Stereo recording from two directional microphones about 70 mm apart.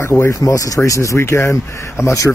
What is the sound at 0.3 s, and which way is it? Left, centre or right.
Speech, left.